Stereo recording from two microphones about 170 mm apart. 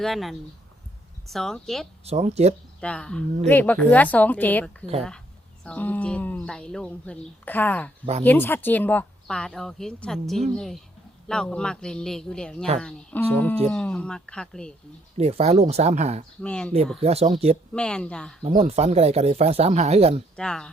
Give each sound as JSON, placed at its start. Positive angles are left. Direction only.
{"t": 0.0, "sound": "speech", "side_deg": 0}
{"t": 2.0, "sound": "speech", "side_deg": -40}
{"t": 2.8, "sound": "speech", "side_deg": 5}
{"t": 15.2, "sound": "speech", "side_deg": -40}
{"t": 16.4, "sound": "speech", "side_deg": 5}
{"t": 17.0, "sound": "speech", "side_deg": -40}
{"t": 17.7, "sound": "speech", "side_deg": 5}
{"t": 18.4, "sound": "speech", "side_deg": -40}
{"t": 20.3, "sound": "speech", "side_deg": 5}